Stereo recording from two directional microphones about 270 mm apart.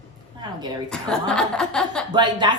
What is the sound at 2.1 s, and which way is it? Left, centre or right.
Speech, centre.